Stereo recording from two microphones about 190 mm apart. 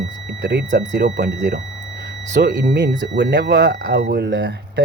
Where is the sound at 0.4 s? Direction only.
65° right (ahead or behind).